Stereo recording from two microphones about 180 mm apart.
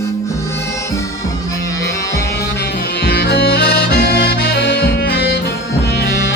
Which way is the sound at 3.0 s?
65° left (ahead or behind).